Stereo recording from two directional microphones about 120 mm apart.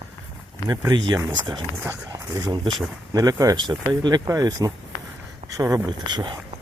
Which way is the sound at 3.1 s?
30° right (ahead or behind).